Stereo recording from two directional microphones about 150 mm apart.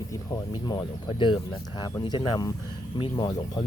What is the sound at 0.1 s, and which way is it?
Speech, 25° left (ahead or behind).